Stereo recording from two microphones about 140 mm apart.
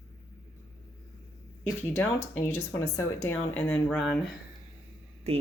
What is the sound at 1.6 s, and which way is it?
Speech, 15° left (ahead or behind).